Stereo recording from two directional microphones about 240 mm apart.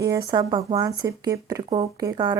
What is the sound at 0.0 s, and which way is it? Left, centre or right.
Speech, centre.